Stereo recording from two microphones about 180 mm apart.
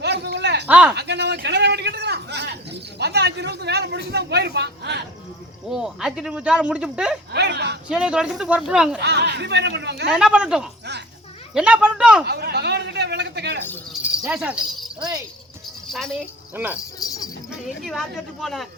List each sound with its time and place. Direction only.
0.0 s a sound: 70° right (ahead or behind)
0.7 s speech: 10° right (ahead or behind)
0.9 s speech: 70° right (ahead or behind)
5.7 s speech: 5° right (ahead or behind)
7.3 s speech: 70° right (ahead or behind)
7.9 s speech: 5° right (ahead or behind)
9.0 s speech: 70° right (ahead or behind)
10.1 s speech: 5° right (ahead or behind)
12.2 s speech: 65° right (ahead or behind)
13.9 s keys jangling: 5° right (ahead or behind)
15.9 s speech: centre (ahead or behind)
17.0 s jingle bell: 20° left (ahead or behind)
17.8 s speech: centre (ahead or behind)